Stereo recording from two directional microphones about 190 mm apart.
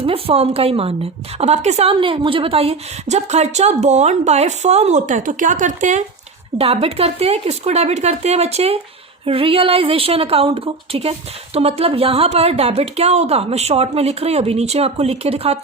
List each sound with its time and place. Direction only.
0.0 s a woman's voice: 30° right (ahead or behind)